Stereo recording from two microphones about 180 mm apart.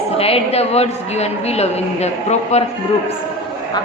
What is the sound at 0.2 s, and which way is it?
A woman's voice, 35° left (ahead or behind).